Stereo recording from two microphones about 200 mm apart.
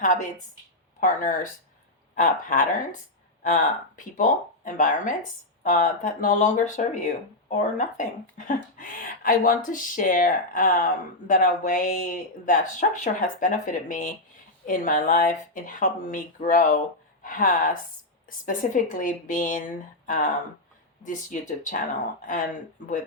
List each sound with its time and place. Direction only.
0.0 s a woman's voice: 40° left (ahead or behind)